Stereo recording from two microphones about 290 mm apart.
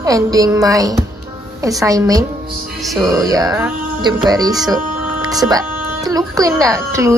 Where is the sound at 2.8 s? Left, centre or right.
Centre.